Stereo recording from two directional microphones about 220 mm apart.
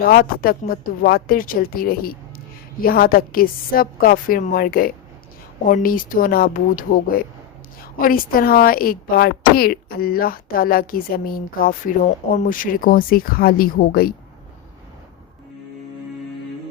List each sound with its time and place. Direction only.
0.0 s speech: 40° left (ahead or behind)